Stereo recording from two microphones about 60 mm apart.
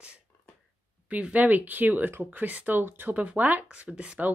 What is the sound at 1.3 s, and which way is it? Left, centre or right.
Speech, right.